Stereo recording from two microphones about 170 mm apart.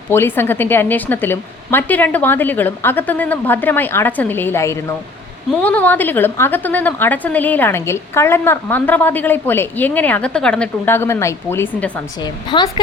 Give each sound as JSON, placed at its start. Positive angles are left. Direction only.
{"t": 0.1, "sound": "a woman's voice", "side_deg": 15}
{"t": 12.2, "sound": "a woman's voice", "side_deg": 25}